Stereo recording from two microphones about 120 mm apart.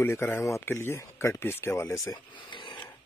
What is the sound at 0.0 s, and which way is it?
Speech, 20° left (ahead or behind).